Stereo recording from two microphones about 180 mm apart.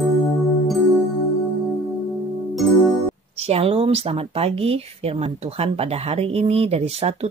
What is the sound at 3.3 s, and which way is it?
Speech, 35° right (ahead or behind).